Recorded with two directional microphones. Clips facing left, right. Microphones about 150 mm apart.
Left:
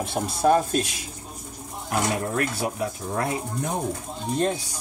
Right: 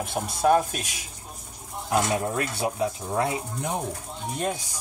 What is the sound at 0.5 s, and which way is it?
Speech, 5° right (ahead or behind).